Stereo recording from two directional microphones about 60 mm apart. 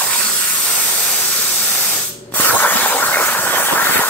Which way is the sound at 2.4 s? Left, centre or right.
Left.